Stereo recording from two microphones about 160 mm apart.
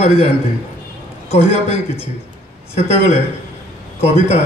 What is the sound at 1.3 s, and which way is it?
Speech, 40° left (ahead or behind).